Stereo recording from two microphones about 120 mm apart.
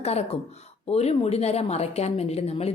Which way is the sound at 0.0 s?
60° left (ahead or behind).